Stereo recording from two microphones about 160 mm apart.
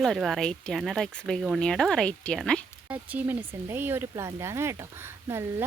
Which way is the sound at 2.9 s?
10° right (ahead or behind).